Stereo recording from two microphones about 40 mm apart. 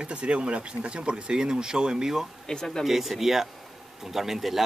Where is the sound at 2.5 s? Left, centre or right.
Centre.